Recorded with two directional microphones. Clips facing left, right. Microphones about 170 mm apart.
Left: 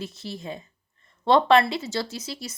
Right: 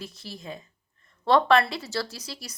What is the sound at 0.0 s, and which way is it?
A woman's voice, 25° left (ahead or behind).